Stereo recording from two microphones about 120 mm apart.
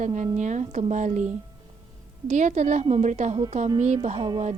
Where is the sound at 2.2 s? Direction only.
90° right.